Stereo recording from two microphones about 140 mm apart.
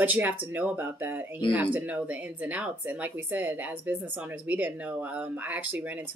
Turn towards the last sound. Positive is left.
turn(degrees=-10)  # may be behind; listen again after turning